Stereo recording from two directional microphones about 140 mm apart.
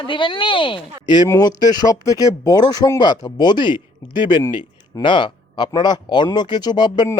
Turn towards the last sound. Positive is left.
turn(degrees=30)  # may be behind; listen again after turning